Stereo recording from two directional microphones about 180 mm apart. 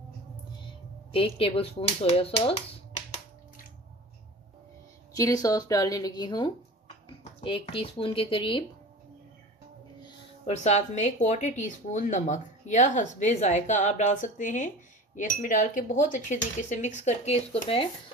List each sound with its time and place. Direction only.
1.1 s speech: 30° left (ahead or behind)
5.1 s a woman's voice: 20° left (ahead or behind)
10.0 s speech: 35° left (ahead or behind)
15.1 s cutlery: 45° left (ahead or behind)